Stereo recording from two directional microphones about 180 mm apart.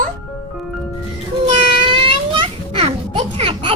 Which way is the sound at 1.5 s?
30° right (ahead or behind).